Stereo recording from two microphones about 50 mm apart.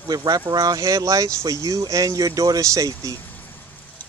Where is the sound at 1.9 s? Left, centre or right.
Right.